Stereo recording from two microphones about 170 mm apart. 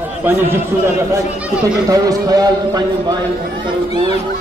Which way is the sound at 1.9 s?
20° right (ahead or behind).